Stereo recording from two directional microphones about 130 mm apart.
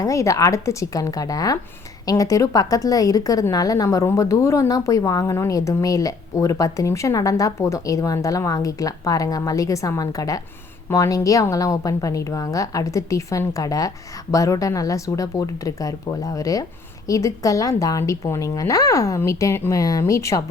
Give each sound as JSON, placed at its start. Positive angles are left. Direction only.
{"t": 0.0, "sound": "a woman's voice", "side_deg": 25}